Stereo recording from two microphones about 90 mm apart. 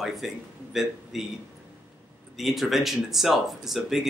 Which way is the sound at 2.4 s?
Centre (ahead or behind).